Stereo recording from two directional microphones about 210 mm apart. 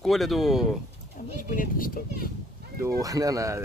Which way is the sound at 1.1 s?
40° left (ahead or behind).